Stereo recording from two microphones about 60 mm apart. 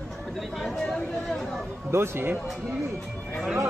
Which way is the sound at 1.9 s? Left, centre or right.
Right.